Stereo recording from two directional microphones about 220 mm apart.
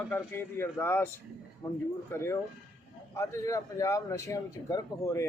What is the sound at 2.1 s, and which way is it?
A man's voice, 10° left (ahead or behind).